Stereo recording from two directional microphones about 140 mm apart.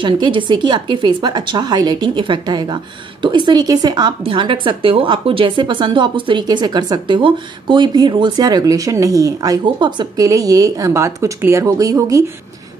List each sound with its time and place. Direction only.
0.0 s speech: 35° right (ahead or behind)